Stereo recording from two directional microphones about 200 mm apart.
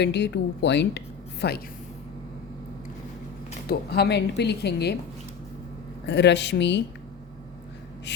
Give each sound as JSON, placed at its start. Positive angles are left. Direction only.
{"t": 0.0, "sound": "a woman's voice", "side_deg": 60}
{"t": 3.7, "sound": "a woman's voice", "side_deg": 55}
{"t": 6.1, "sound": "a woman's voice", "side_deg": 60}